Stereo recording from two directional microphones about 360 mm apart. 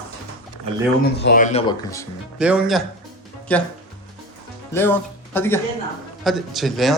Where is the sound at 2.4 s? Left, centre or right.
Centre.